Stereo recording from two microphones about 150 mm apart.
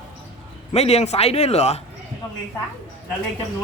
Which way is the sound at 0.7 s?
45° left (ahead or behind).